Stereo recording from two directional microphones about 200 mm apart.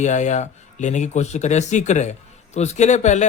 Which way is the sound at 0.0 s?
35° left (ahead or behind).